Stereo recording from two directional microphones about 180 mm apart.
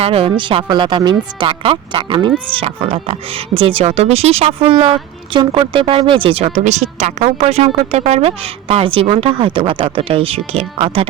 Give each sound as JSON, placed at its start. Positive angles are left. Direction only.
{"t": 0.0, "sound": "speech", "side_deg": -35}